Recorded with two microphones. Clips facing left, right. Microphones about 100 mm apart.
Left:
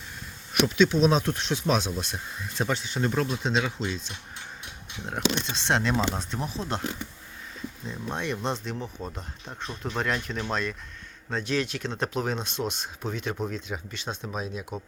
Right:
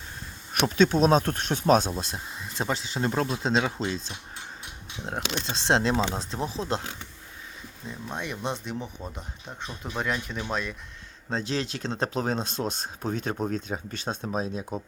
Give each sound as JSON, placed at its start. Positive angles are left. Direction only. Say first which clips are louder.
{"t": 0.6, "sound": "speech", "louder": "even", "side_deg": -45}
{"t": 2.1, "sound": "speech", "louder": "left 1 dB", "side_deg": -25}
{"t": 5.0, "sound": "speech", "louder": "left 3 dB", "side_deg": -30}
{"t": 7.9, "sound": "speech", "louder": "left 2 dB", "side_deg": -5}
{"t": 11.3, "sound": "speech", "louder": "left 1 dB", "side_deg": -30}
{"t": 14.3, "sound": "speech", "louder": "right 4 dB", "side_deg": -35}